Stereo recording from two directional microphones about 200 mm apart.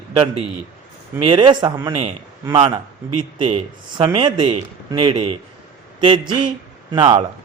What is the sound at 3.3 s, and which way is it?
Speech, 25° right (ahead or behind).